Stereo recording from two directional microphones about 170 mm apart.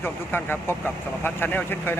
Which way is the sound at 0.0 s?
10° left (ahead or behind).